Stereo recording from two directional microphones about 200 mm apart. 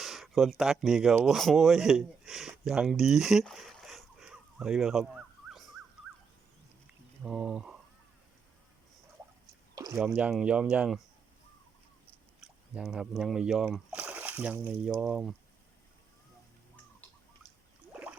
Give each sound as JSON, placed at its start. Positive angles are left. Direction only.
{"t": 0.0, "sound": "speech", "side_deg": 0}
{"t": 7.2, "sound": "speech", "side_deg": -5}
{"t": 9.7, "sound": "a sound", "side_deg": -15}
{"t": 10.2, "sound": "speech", "side_deg": -5}
{"t": 12.4, "sound": "speech", "side_deg": -5}
{"t": 17.9, "sound": "a sound", "side_deg": -5}